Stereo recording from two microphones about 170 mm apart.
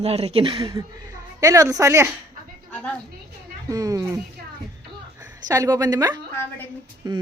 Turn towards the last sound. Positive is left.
turn(degrees=-25)  # may be behind; listen again after turning